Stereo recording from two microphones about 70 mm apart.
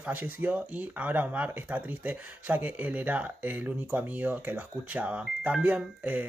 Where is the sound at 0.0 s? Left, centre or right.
Right.